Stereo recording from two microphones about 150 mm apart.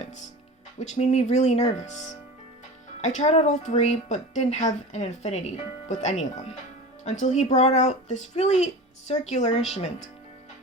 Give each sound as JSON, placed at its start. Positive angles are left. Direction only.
{"t": 0.8, "sound": "speech", "side_deg": 50}
{"t": 3.0, "sound": "speech", "side_deg": 50}